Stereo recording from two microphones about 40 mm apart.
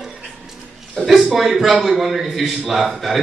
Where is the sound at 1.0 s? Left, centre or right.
Centre.